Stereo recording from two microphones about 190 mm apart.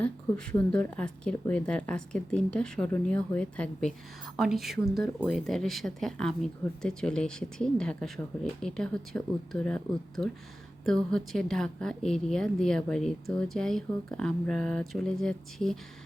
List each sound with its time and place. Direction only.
0.0 s a woman's voice: 5° left (ahead or behind)